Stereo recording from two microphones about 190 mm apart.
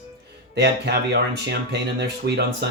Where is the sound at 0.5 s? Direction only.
65° right (ahead or behind).